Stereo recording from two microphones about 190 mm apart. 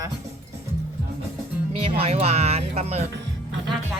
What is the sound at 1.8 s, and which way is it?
Music, 30° right (ahead or behind).